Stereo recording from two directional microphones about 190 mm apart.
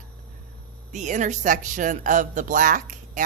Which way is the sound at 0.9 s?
40° right (ahead or behind).